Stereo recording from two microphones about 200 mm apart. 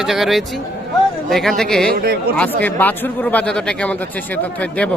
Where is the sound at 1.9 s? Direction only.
50° right (ahead or behind).